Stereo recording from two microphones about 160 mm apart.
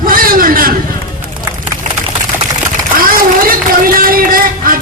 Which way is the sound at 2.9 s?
65° right (ahead or behind).